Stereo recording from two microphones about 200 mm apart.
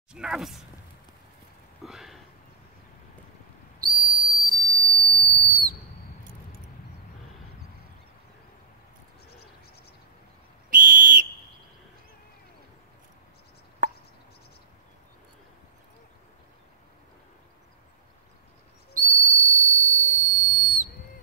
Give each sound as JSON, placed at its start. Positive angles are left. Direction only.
{"t": 0.1, "sound": "speech", "side_deg": -5}
{"t": 1.8, "sound": "a sound", "side_deg": 0}
{"t": 3.8, "sound": "whistle", "side_deg": -45}
{"t": 10.7, "sound": "whistle", "side_deg": -45}
{"t": 13.8, "sound": "a sound", "side_deg": -40}
{"t": 18.9, "sound": "whistle", "side_deg": -40}